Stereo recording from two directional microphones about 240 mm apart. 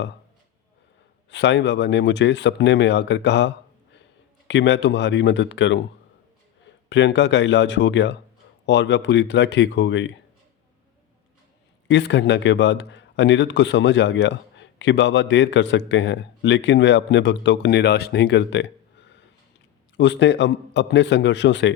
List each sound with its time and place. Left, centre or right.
1.3 s speech: left
6.9 s speech: left
11.9 s speech: left